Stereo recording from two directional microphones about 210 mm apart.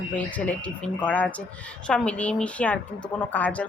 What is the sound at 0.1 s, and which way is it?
A woman's voice, 5° left (ahead or behind).